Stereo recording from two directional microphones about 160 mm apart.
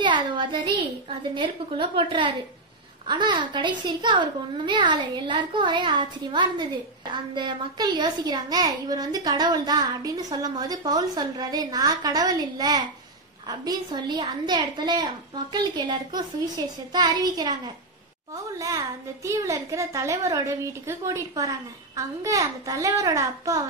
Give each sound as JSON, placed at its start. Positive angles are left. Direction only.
{"t": 0.0, "sound": "a sound", "side_deg": -30}
{"t": 1.3, "sound": "a woman's voice", "side_deg": -30}
{"t": 18.6, "sound": "a child's voice", "side_deg": -20}